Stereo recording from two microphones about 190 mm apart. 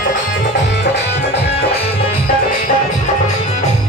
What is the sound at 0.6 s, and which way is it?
Music, 65° left (ahead or behind).